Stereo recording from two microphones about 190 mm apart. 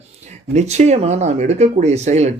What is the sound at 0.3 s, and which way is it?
Speech, 35° right (ahead or behind).